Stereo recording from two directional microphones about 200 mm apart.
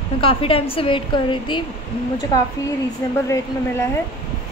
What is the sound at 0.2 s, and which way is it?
A woman's voice, 25° left (ahead or behind).